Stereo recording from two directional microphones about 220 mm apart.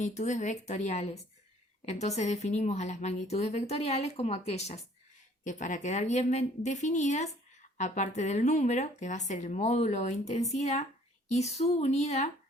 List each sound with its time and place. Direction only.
0.0 s a woman's voice: 30° left (ahead or behind)